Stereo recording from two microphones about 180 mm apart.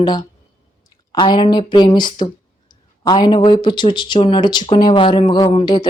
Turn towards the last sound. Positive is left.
turn(degrees=30)  # may be behind; listen again after turning